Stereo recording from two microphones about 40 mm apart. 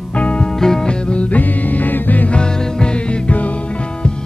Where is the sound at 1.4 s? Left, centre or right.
Left.